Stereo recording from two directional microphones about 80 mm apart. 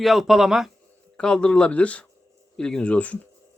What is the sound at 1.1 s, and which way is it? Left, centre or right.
Speech, centre.